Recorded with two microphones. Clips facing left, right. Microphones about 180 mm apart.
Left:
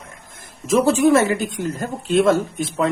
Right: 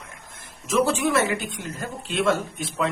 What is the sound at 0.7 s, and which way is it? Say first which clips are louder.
Speech: left 7 dB; 40° left (ahead or behind).